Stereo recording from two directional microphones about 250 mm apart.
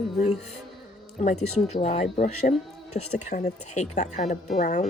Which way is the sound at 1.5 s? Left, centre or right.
Left.